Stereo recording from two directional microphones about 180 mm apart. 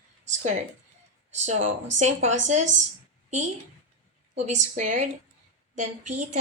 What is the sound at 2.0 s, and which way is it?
A woman's voice, 40° right (ahead or behind).